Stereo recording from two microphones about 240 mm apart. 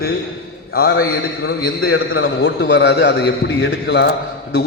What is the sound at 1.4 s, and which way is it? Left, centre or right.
Speech, left.